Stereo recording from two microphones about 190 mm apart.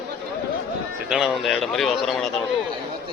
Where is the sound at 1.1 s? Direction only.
Centre (ahead or behind).